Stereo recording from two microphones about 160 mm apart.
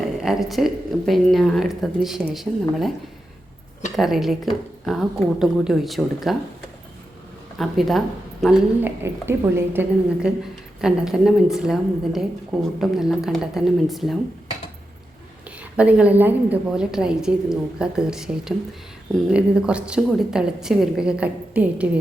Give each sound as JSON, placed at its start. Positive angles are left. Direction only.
{"t": 0.2, "sound": "a woman's voice", "side_deg": 0}
{"t": 3.9, "sound": "a woman's voice", "side_deg": 0}
{"t": 7.6, "sound": "speech", "side_deg": 0}
{"t": 8.8, "sound": "a woman's voice", "side_deg": -15}
{"t": 10.8, "sound": "a woman's voice", "side_deg": -5}
{"t": 15.7, "sound": "a woman's voice", "side_deg": -10}